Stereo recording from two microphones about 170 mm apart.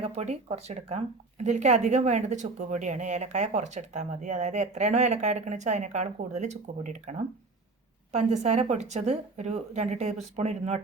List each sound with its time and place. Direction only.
0.0 s a woman's voice: 40° right (ahead or behind)